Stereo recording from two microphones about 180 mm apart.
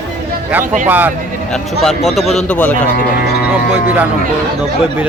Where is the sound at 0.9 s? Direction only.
10° right (ahead or behind); by 2.7 s 5° left (ahead or behind).